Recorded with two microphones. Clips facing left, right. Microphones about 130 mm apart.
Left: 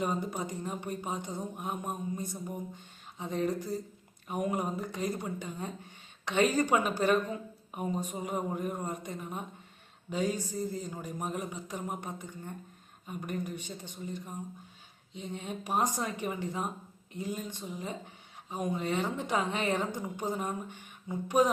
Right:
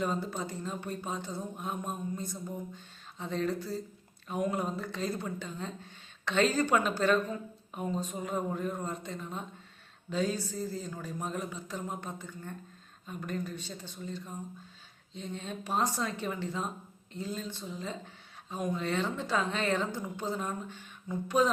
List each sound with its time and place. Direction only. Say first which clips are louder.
0.0 s speech: even; 15° left (ahead or behind)